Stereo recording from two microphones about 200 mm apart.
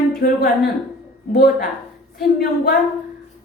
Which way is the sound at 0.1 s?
45° left (ahead or behind).